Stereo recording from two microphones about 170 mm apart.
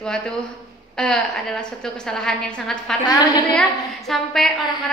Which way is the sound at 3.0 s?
25° left (ahead or behind).